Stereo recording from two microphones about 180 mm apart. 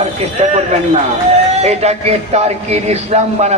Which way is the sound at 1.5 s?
35° right (ahead or behind).